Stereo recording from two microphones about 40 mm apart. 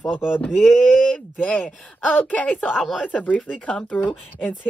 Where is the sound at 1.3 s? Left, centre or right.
Left.